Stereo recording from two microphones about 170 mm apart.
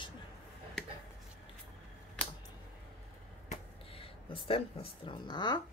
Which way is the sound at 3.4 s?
35° left (ahead or behind).